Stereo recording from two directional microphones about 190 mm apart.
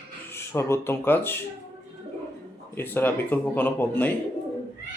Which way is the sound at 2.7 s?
10° left (ahead or behind).